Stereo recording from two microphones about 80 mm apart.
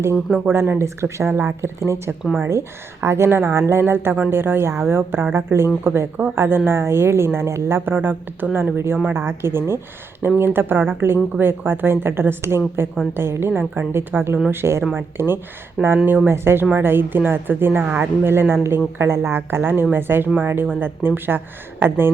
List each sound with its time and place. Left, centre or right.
0.4 s speech: right